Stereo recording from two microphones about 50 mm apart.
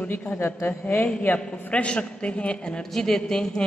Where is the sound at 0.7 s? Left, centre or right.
Left.